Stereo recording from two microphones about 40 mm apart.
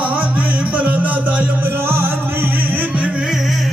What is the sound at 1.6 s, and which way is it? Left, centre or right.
Music, right.